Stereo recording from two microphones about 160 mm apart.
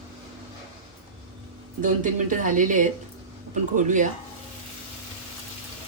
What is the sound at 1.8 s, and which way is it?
Speech, 55° right (ahead or behind).